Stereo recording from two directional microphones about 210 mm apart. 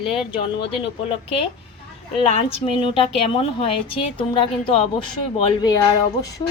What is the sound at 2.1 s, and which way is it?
A woman's voice, 25° left (ahead or behind).